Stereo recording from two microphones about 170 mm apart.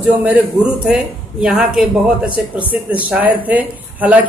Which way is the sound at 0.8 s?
5° right (ahead or behind).